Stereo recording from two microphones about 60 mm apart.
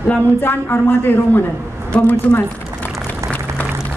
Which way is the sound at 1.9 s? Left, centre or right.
Left.